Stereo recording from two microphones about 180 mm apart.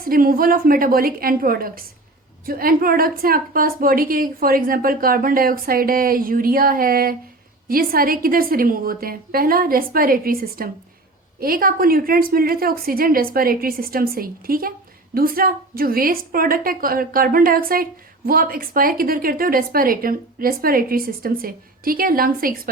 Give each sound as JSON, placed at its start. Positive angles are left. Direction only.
{"t": 0.0, "sound": "a woman's voice", "side_deg": -55}